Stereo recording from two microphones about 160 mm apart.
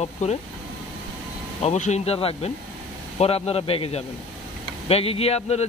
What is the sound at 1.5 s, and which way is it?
Speech, 45° left (ahead or behind).